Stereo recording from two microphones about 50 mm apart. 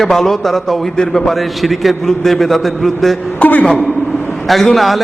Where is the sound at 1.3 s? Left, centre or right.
Centre.